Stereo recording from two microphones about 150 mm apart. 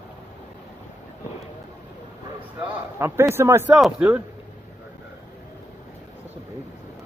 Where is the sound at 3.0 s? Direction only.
15° right (ahead or behind).